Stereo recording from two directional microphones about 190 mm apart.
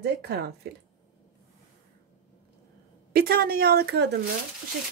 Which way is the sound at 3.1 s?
55° right (ahead or behind).